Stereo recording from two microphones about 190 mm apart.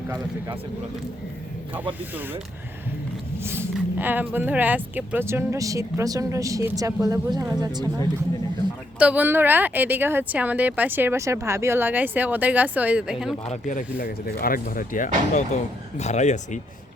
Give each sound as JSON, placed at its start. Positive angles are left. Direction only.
{"t": 0.1, "sound": "speech", "side_deg": -15}
{"t": 3.4, "sound": "speech", "side_deg": -10}
{"t": 9.0, "sound": "speech", "side_deg": -5}
{"t": 13.4, "sound": "speech", "side_deg": 40}
{"t": 14.0, "sound": "speech", "side_deg": 55}